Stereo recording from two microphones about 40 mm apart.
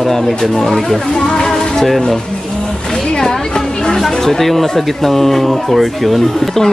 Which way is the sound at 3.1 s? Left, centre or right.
Centre.